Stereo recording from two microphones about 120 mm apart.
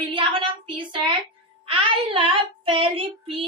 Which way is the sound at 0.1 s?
45° right (ahead or behind).